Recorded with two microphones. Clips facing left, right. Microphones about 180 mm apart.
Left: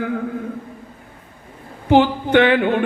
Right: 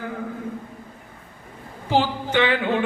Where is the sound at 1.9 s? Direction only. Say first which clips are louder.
Left 8 dB; 60° left (ahead or behind).